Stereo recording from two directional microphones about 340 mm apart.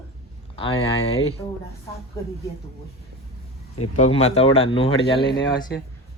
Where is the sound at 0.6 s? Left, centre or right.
Centre.